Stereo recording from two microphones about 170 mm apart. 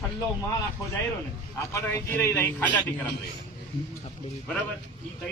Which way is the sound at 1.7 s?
15° left (ahead or behind).